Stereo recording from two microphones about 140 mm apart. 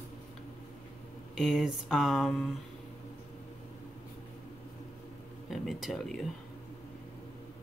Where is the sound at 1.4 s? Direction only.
Centre (ahead or behind).